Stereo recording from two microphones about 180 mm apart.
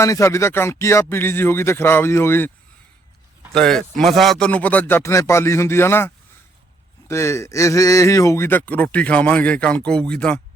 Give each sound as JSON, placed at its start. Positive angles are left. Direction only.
{"t": 0.0, "sound": "speech", "side_deg": 15}
{"t": 3.5, "sound": "speech", "side_deg": 5}